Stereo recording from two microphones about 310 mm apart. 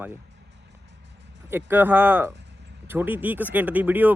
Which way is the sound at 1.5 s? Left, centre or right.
Centre.